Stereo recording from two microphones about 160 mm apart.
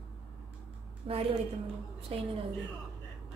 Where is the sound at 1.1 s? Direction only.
40° right (ahead or behind).